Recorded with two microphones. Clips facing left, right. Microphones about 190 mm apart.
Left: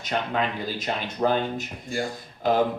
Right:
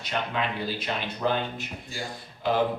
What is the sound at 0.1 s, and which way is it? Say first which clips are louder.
Speech: left 3 dB; 45° left (ahead or behind).